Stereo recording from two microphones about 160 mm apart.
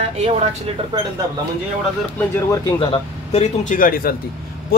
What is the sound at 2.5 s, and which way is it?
A man's voice, 30° left (ahead or behind).